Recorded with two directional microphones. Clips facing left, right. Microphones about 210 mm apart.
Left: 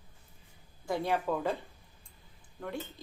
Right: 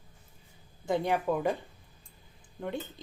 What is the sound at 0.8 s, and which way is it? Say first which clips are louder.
Speech: right 3 dB; 20° right (ahead or behind).